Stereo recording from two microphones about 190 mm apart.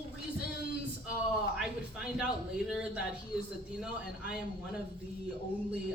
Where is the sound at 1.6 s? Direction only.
5° right (ahead or behind).